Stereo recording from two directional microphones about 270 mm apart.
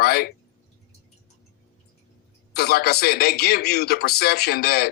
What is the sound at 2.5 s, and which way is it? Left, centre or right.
Speech, left.